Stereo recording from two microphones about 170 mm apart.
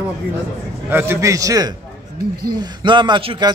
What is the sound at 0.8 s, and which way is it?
A man's voice, 15° right (ahead or behind).